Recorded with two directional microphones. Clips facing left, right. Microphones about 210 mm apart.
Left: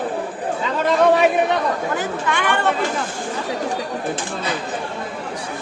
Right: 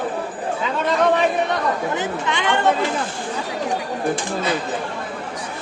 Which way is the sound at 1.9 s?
20° right (ahead or behind).